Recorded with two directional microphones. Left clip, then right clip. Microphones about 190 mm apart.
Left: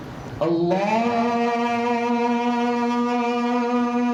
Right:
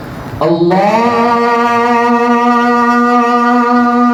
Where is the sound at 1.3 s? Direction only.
25° right (ahead or behind).